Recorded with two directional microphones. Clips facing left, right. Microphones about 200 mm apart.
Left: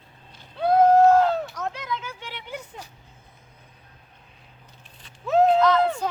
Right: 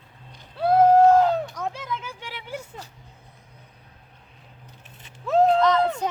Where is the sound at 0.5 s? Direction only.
5° right (ahead or behind).